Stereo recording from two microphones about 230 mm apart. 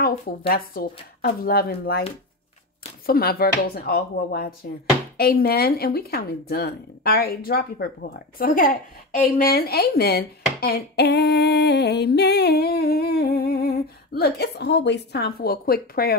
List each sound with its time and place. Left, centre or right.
0.5 s speech: left
3.1 s speech: left
5.1 s female singing: left